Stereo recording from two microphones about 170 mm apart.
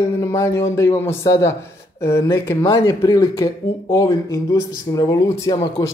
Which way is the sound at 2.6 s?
20° left (ahead or behind).